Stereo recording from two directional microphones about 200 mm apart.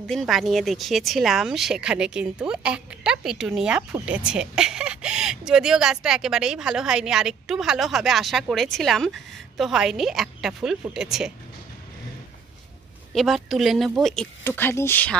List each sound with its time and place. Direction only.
0.0 s speech: centre (ahead or behind)
13.1 s speech: centre (ahead or behind)